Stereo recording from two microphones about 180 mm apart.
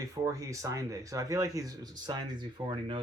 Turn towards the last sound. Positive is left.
turn(degrees=-25)  # may be behind; listen again after turning